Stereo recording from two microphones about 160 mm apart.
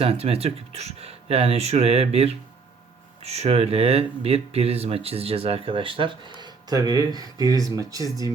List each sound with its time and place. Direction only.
0.0 s speech: 40° right (ahead or behind); by 8.3 s 20° right (ahead or behind)